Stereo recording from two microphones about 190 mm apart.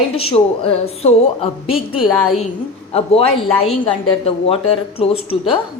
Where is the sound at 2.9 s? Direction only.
30° left (ahead or behind).